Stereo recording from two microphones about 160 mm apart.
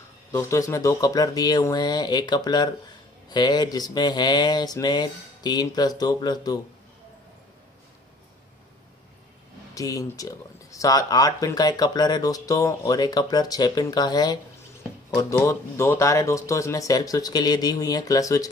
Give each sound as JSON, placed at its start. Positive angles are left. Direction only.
{"t": 0.3, "sound": "speech", "side_deg": 20}
{"t": 9.8, "sound": "speech", "side_deg": 20}